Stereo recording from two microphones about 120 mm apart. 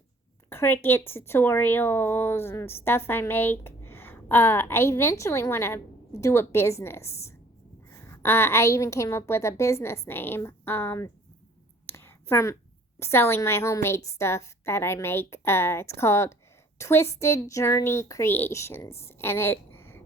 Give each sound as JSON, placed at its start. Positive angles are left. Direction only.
{"t": 0.5, "sound": "a woman's voice", "side_deg": 20}
{"t": 11.9, "sound": "a sound", "side_deg": 20}
{"t": 13.0, "sound": "a woman's voice", "side_deg": 20}